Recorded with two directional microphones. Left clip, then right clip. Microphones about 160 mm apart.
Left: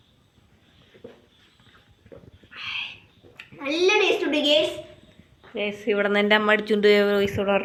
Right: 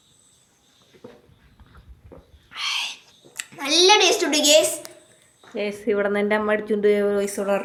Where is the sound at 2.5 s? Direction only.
30° right (ahead or behind).